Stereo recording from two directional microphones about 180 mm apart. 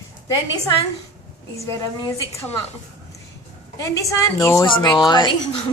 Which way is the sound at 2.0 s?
15° left (ahead or behind).